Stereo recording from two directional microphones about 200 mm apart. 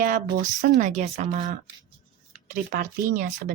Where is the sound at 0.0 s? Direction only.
40° right (ahead or behind).